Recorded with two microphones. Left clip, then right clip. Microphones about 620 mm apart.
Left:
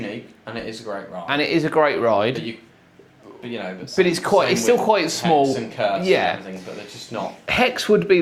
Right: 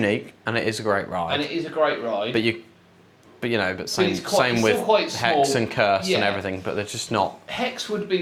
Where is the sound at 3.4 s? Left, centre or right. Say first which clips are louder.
Right 7 dB; right.